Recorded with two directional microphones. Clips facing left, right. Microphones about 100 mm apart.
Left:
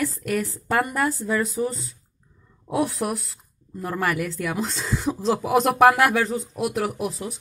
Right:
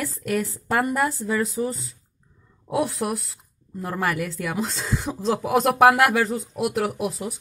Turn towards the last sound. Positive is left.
turn(degrees=-5)  # may be behind; listen again after turning